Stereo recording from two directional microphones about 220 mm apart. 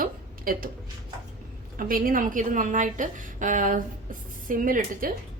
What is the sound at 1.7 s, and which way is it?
A woman's voice, 40° right (ahead or behind).